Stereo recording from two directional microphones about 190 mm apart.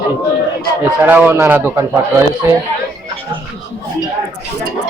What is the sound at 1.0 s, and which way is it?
Speech, 10° right (ahead or behind).